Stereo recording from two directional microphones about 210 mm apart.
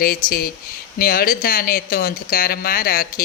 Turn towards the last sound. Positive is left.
turn(degrees=45)  # may be behind; listen again after turning